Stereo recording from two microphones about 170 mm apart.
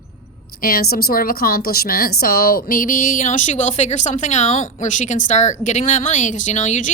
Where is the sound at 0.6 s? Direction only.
60° left (ahead or behind).